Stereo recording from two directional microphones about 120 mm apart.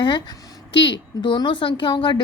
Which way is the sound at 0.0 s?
40° left (ahead or behind).